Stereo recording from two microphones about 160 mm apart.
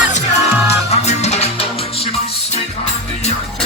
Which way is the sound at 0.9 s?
45° left (ahead or behind).